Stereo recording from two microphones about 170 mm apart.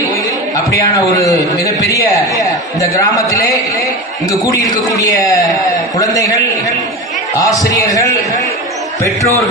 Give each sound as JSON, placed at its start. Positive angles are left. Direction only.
{"t": 0.5, "sound": "a man's voice", "side_deg": 20}